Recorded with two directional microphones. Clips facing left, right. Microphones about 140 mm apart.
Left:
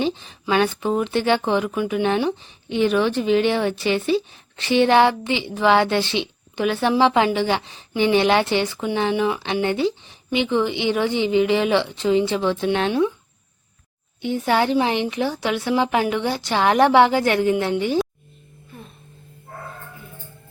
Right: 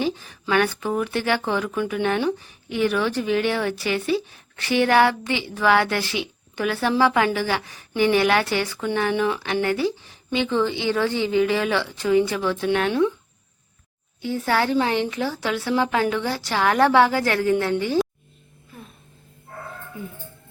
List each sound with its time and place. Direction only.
0.0 s speech: 20° left (ahead or behind)
14.2 s speech: 20° left (ahead or behind)